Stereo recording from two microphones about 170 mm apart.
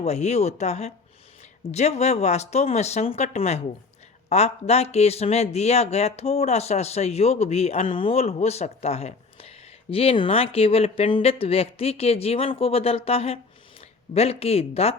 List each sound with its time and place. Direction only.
0.0 s speech: 40° left (ahead or behind)